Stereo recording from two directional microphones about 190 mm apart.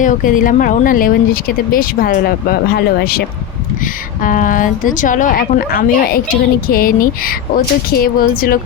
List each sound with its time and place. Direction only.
0.0 s speech: 45° left (ahead or behind)